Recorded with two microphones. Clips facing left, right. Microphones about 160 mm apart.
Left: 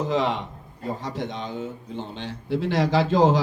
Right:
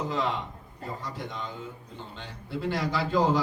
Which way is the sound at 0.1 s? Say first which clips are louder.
Left 6 dB; 85° left.